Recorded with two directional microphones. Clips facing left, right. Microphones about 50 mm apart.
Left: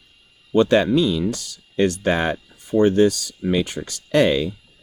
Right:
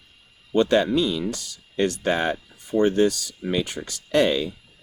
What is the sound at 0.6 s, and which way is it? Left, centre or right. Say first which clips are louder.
Speech: left 3 dB; left.